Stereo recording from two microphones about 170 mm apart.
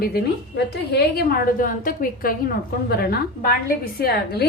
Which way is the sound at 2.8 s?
70° left (ahead or behind).